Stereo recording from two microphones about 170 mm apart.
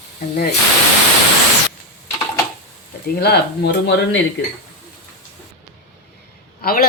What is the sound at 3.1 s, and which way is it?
Speech, 70° left (ahead or behind).